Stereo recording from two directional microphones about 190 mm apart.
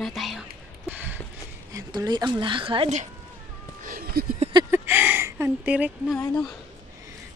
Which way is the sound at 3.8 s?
50° right (ahead or behind).